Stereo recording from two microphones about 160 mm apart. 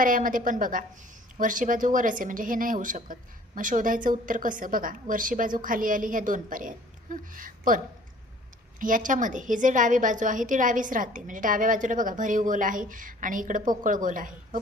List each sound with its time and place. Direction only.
0.0 s a woman's voice: 60° right (ahead or behind)
8.8 s a woman's voice: 55° right (ahead or behind)